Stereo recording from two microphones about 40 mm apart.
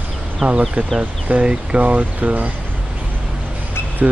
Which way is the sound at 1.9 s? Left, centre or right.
Right.